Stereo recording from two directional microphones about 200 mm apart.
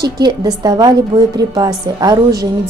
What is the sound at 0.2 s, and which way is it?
A woman's voice, 20° right (ahead or behind).